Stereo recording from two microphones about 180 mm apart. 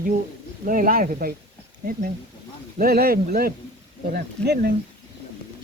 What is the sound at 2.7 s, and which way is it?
Speech, 55° right (ahead or behind).